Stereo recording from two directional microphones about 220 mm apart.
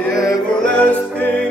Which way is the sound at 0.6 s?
5° left (ahead or behind).